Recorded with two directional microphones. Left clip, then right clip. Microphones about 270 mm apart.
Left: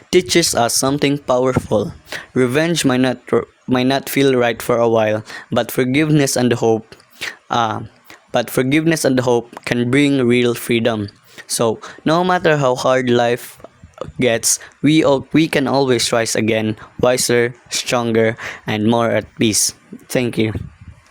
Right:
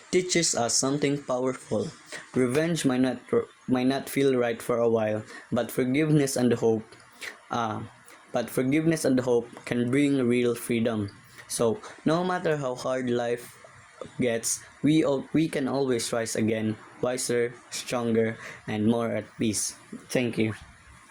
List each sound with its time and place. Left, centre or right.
0.1 s speech: left